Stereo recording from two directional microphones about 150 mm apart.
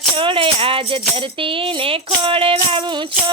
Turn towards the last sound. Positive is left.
turn(degrees=-35)  # may be behind; listen again after turning